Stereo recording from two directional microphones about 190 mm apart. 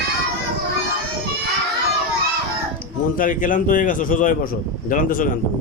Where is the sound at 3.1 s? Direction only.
45° left (ahead or behind).